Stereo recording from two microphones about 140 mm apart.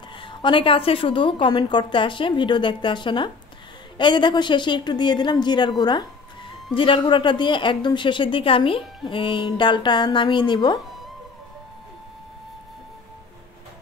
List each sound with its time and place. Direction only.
0.2 s speech: 35° left (ahead or behind)